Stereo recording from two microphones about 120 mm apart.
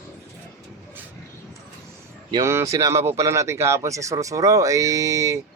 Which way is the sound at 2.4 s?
25° right (ahead or behind).